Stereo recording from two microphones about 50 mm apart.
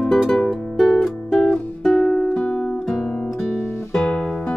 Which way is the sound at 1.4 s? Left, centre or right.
Left.